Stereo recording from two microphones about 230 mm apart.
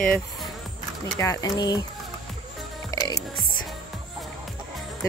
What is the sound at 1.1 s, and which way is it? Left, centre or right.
Speech, centre.